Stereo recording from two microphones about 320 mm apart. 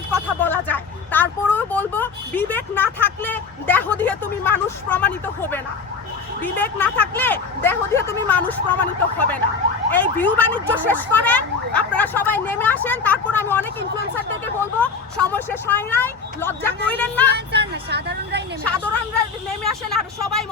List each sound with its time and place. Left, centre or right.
0.1 s speech: centre
17.3 s speech: right
19.6 s speech: centre